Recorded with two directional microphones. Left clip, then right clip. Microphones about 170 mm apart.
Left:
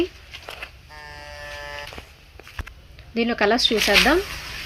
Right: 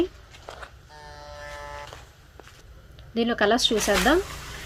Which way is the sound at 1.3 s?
20° left (ahead or behind).